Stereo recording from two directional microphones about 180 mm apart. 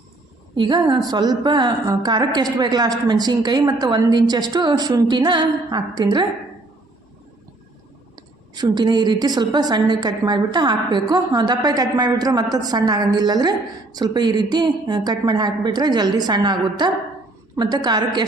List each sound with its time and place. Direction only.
0.5 s a woman's voice: 25° right (ahead or behind)
8.1 s a woman's voice: 25° right (ahead or behind)